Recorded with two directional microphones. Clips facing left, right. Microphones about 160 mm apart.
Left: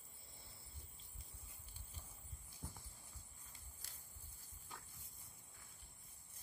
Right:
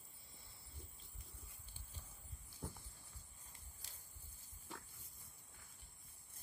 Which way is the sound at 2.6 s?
80° right.